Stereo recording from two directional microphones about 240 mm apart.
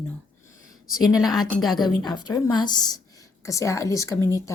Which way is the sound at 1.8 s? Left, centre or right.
Centre.